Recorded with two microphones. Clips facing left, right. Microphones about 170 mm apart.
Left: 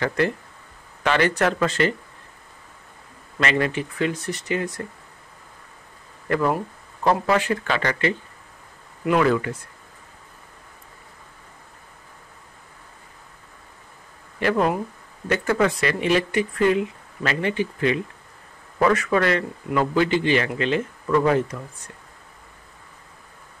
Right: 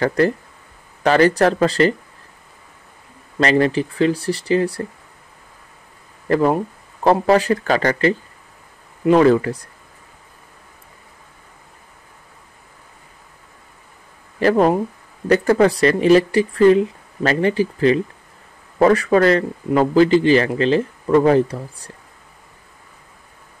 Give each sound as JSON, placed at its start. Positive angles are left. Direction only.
{"t": 0.0, "sound": "speech", "side_deg": -40}
{"t": 3.3, "sound": "speech", "side_deg": -35}
{"t": 6.2, "sound": "speech", "side_deg": -30}
{"t": 14.4, "sound": "speech", "side_deg": -35}